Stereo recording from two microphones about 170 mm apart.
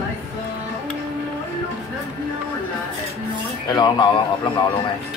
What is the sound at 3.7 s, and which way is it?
Speech, 25° left (ahead or behind).